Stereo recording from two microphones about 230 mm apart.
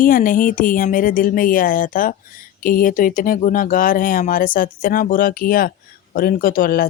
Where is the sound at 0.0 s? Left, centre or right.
Left.